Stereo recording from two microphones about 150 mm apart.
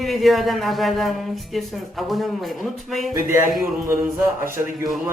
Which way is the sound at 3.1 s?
20° right (ahead or behind).